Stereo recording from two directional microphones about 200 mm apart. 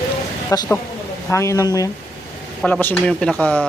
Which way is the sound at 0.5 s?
20° left (ahead or behind).